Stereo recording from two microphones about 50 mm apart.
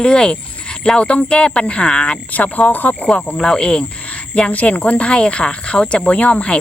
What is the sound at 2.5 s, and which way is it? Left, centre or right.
Speech, left.